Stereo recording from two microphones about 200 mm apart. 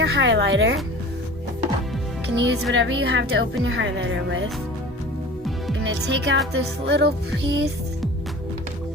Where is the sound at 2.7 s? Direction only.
60° right (ahead or behind).